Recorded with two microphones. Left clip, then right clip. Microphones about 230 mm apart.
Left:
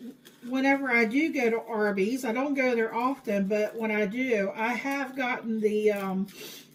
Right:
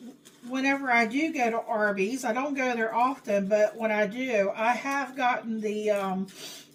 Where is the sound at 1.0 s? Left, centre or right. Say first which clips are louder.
Left 2 dB; right.